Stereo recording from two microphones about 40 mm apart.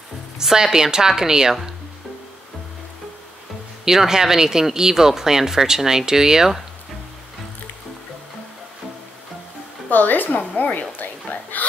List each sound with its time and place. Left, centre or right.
0.4 s speech: centre
3.8 s speech: centre
9.8 s a woman's voice: left